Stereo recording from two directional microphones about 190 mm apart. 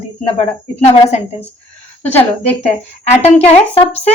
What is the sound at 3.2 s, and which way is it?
Speech, 35° left (ahead or behind).